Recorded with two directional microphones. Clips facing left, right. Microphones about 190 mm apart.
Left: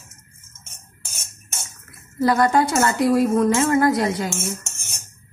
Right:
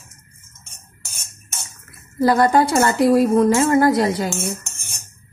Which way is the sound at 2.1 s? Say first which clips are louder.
Right 2 dB; 35° right (ahead or behind).